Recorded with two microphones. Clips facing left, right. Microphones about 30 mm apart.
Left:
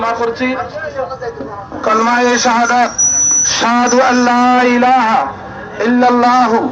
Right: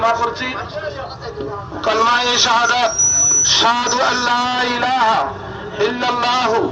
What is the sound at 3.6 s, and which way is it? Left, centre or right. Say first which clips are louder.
Speech: left 9 dB; right.